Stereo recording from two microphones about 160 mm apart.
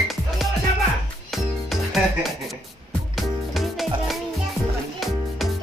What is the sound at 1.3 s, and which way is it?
Music, centre (ahead or behind).